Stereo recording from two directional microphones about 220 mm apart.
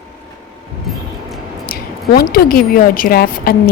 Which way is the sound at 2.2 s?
40° left (ahead or behind).